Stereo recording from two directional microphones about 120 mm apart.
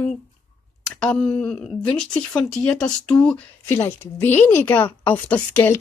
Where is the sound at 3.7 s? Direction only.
20° left (ahead or behind).